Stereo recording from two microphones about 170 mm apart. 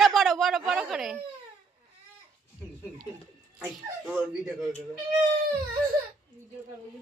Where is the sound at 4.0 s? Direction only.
Centre (ahead or behind).